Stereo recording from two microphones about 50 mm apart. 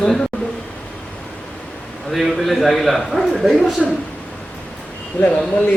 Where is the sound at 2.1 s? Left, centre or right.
Centre.